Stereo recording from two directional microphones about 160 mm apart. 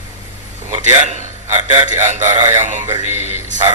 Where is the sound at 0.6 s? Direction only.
45° right (ahead or behind).